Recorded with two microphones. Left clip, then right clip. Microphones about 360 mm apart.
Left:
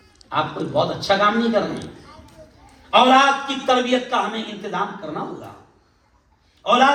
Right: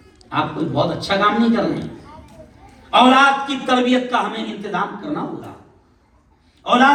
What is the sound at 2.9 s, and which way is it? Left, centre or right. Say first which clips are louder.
A man's voice: right 2 dB; left.